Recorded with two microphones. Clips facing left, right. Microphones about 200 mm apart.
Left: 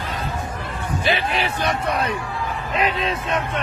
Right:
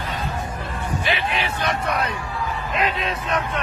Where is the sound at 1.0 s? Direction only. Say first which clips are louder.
Left 4 dB; 35° left (ahead or behind).